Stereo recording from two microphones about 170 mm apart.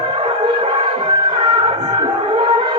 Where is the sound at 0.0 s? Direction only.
30° right (ahead or behind).